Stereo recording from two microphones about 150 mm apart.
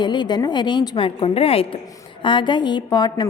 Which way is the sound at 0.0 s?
30° left (ahead or behind).